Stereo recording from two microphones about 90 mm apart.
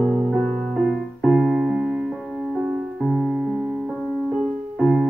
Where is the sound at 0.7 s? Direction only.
Centre (ahead or behind).